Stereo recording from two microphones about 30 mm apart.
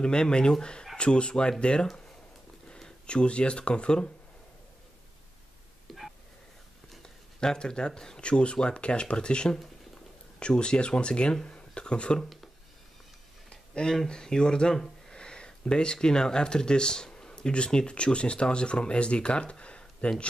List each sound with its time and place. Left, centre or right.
0.0 s speech: left
3.1 s speech: left
5.9 s a sound: centre
7.0 s writing: left
8.2 s speech: left
10.5 s speech: left
13.5 s a sound: left
14.0 s speech: left